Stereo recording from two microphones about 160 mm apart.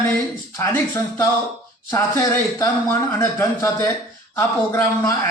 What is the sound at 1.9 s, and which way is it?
Speech, 20° left (ahead or behind).